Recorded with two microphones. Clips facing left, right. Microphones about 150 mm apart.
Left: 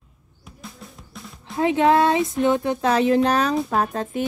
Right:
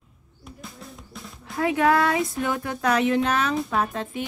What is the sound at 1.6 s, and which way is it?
A woman's voice, 25° left (ahead or behind).